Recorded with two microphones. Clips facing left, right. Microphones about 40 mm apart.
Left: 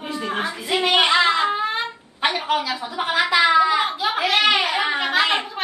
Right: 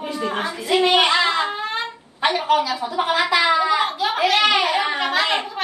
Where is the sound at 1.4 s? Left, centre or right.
Centre.